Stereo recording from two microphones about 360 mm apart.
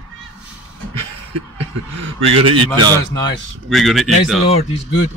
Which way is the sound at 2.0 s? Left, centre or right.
Right.